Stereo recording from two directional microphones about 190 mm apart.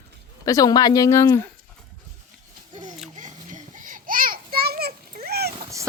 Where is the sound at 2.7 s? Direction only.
40° right (ahead or behind).